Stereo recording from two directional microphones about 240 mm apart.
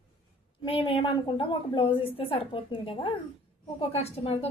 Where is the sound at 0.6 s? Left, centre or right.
Left.